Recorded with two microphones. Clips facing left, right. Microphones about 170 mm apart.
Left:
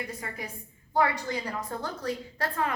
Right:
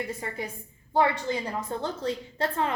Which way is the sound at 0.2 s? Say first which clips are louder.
Right 4 dB; 25° right (ahead or behind).